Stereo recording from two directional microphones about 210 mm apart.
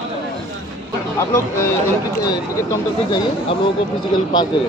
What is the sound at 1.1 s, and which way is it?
Speech, 15° left (ahead or behind).